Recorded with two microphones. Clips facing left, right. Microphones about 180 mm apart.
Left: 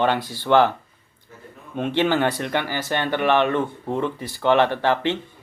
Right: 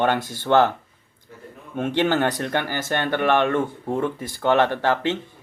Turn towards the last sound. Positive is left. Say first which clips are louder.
# left 1 dB
turn(degrees=-45)  # may be behind; listen again after turning